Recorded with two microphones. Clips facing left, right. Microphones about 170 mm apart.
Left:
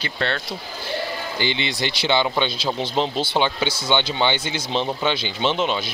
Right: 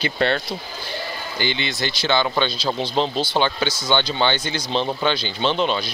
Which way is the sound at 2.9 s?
15° left (ahead or behind).